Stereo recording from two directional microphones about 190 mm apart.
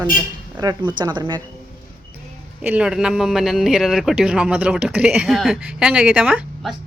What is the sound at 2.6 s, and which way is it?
A man's voice, 5° right (ahead or behind).